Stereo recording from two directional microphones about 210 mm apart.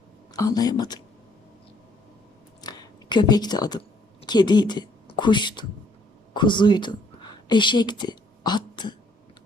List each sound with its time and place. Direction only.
0.3 s speech: 15° left (ahead or behind)
2.6 s a sound: 20° left (ahead or behind)
6.3 s a woman's voice: 20° left (ahead or behind)